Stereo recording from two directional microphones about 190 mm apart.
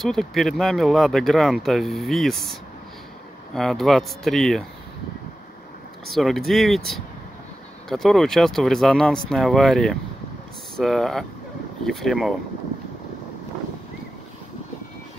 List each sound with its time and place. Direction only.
0.0 s speech: centre (ahead or behind)
3.5 s speech: centre (ahead or behind)
6.0 s speech: centre (ahead or behind)